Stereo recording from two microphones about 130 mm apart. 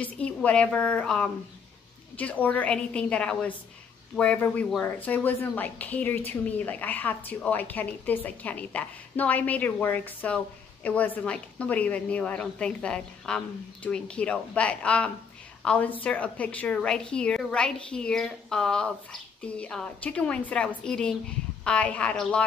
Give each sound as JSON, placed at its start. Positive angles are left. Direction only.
{"t": 0.0, "sound": "a woman's voice", "side_deg": 10}